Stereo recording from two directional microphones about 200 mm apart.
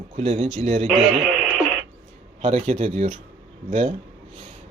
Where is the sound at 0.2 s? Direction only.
30° right (ahead or behind).